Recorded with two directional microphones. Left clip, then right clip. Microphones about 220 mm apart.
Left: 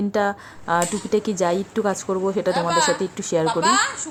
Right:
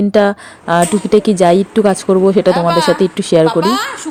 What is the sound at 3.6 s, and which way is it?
Speech, centre (ahead or behind).